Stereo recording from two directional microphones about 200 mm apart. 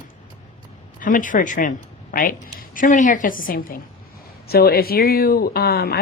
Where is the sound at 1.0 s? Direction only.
40° left (ahead or behind).